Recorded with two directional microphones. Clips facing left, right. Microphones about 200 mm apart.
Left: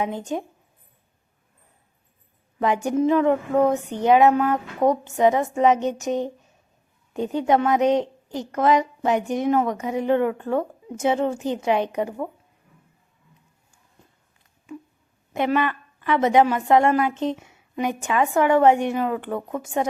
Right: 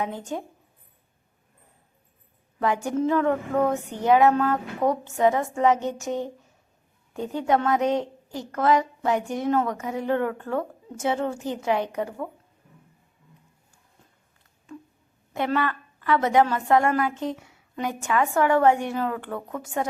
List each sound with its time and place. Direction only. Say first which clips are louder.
0.0 s a woman's voice: left 4 dB; 20° left (ahead or behind)
2.6 s a woman's voice: left 3 dB; 20° left (ahead or behind)
15.3 s a woman's voice: left 3 dB; 20° left (ahead or behind)